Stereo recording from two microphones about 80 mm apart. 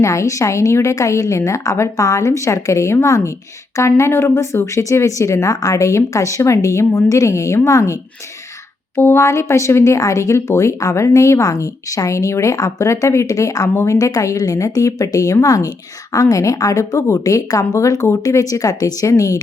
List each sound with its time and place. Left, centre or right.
0.0 s speech: left
9.0 s speech: left